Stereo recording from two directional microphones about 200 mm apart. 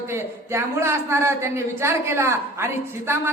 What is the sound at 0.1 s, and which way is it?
A woman's voice, 15° right (ahead or behind).